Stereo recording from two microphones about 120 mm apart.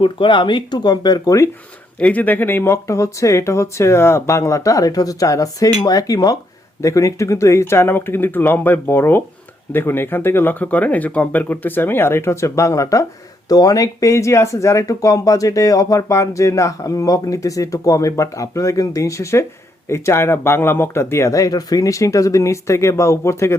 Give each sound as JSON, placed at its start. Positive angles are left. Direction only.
{"t": 0.0, "sound": "speech", "side_deg": 40}
{"t": 2.0, "sound": "speech", "side_deg": 10}